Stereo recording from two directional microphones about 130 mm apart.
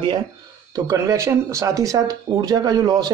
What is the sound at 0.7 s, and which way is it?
A man's voice, 25° right (ahead or behind).